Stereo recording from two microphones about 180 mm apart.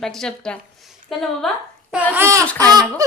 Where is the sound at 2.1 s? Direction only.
15° right (ahead or behind).